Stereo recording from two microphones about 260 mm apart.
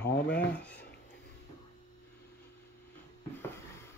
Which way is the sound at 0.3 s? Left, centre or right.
Centre.